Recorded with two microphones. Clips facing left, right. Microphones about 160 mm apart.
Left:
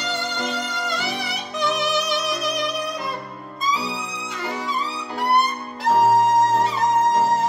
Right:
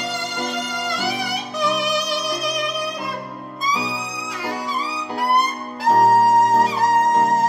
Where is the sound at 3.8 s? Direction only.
Centre (ahead or behind).